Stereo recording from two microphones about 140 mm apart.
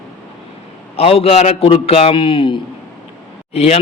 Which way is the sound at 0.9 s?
45° left (ahead or behind).